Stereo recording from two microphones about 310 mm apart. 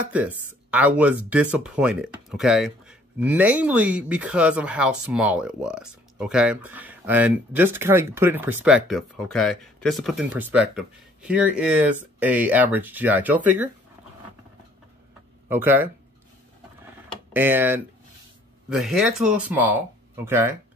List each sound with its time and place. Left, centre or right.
0.1 s speech: centre
15.4 s speech: centre
17.3 s speech: centre